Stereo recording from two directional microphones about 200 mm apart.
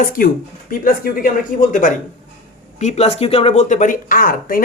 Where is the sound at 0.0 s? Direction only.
45° left (ahead or behind).